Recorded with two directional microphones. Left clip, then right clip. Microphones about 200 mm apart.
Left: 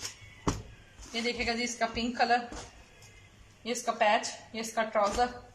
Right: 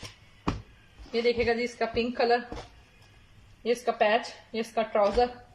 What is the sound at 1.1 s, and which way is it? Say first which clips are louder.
Speech: right 6 dB; 20° right (ahead or behind).